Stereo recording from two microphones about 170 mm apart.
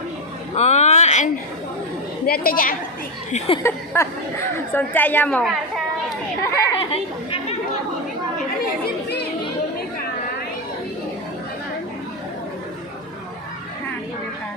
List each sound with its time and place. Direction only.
0.5 s a sound: 40° left (ahead or behind)
2.2 s a woman's voice: 60° left (ahead or behind)
3.3 s speech: 35° left (ahead or behind)
3.6 s a woman's voice: 15° left (ahead or behind); by 5.8 s centre (ahead or behind)
6.4 s a sound: 15° left (ahead or behind)
6.7 s chatter: 35° left (ahead or behind)